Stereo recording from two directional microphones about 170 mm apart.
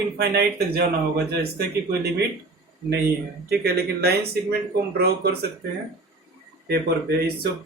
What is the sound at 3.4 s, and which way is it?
Speech, 70° right (ahead or behind).